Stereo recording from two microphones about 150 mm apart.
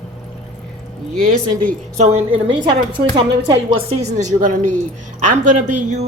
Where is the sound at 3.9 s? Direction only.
55° right (ahead or behind).